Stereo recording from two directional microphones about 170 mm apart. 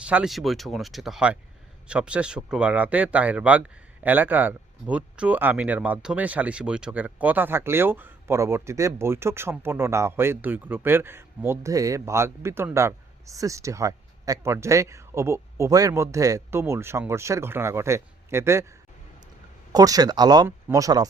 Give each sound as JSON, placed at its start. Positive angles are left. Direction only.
{"t": 0.0, "sound": "speech", "side_deg": -5}
{"t": 19.7, "sound": "speech", "side_deg": -20}